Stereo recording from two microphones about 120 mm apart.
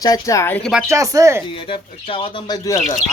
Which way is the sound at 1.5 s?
45° left (ahead or behind).